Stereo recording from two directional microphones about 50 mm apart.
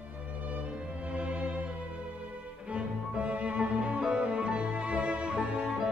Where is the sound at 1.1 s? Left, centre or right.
Right.